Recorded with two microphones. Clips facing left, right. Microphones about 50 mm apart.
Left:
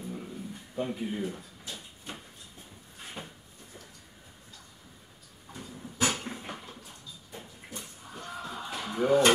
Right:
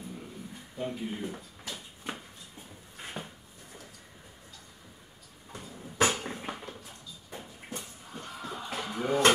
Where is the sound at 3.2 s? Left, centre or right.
Left.